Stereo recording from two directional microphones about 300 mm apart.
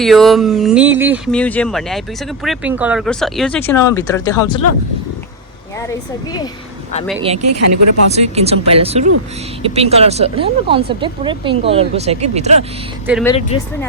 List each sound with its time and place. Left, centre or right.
0.0 s speech: centre
7.2 s speech: centre
7.4 s speech: right
8.1 s speech: right
13.2 s speech: centre